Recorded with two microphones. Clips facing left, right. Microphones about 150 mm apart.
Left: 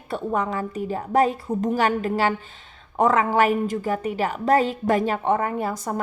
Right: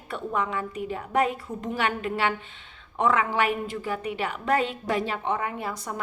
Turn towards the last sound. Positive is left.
turn(degrees=45)  # may be behind; listen again after turning